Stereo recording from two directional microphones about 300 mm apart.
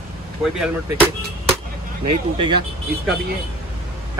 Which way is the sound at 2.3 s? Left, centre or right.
Centre.